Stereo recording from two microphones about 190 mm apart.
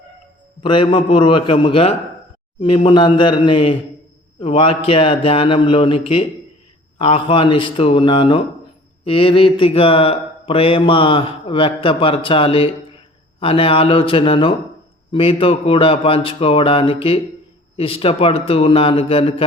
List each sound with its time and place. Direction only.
0.6 s mantra: 25° left (ahead or behind)